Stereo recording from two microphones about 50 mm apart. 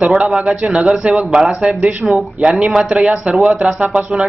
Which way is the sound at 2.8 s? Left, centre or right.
Centre.